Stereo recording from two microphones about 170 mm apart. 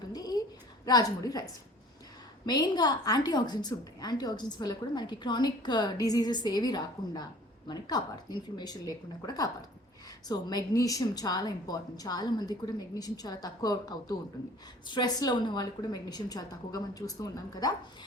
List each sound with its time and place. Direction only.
0.1 s a sound: 20° left (ahead or behind)
0.9 s a woman's voice: 20° left (ahead or behind)
2.5 s a woman's voice: 25° left (ahead or behind)